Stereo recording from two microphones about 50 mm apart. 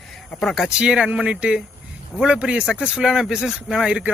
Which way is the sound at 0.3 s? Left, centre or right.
Centre.